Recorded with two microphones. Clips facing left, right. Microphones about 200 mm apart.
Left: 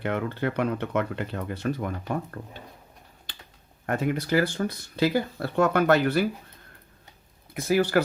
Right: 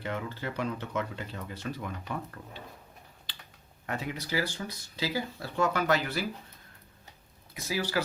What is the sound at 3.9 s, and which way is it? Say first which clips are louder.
Speech: left 9 dB; 50° left (ahead or behind).